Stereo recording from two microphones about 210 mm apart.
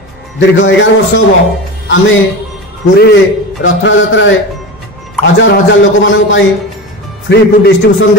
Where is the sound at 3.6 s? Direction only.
65° left (ahead or behind).